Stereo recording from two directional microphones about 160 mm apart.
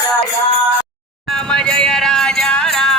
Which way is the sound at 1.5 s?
5° left (ahead or behind).